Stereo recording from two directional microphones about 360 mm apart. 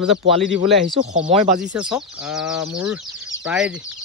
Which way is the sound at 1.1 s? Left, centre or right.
Centre.